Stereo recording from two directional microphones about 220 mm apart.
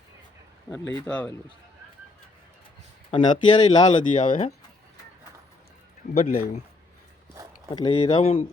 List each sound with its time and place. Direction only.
0.7 s speech: 10° left (ahead or behind)
3.1 s speech: 20° left (ahead or behind)
6.2 s speech: 40° left (ahead or behind)
7.7 s speech: 20° left (ahead or behind)